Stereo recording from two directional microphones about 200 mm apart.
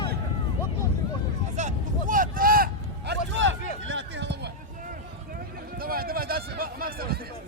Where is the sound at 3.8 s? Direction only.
65° right (ahead or behind).